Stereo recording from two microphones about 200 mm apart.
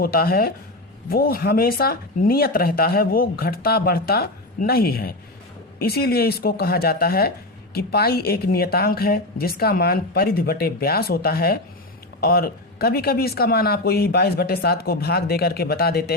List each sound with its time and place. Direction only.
0.0 s speech: 50° left (ahead or behind)